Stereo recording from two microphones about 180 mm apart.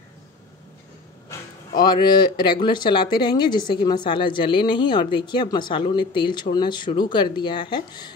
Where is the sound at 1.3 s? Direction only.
25° left (ahead or behind).